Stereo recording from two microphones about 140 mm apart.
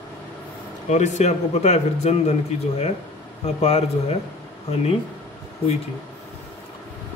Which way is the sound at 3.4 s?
45° left (ahead or behind).